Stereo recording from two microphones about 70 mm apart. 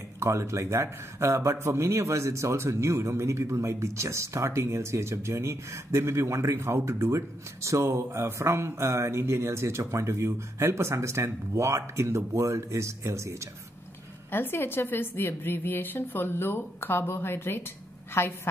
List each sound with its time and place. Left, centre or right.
0.2 s speech: right
14.3 s a woman's voice: left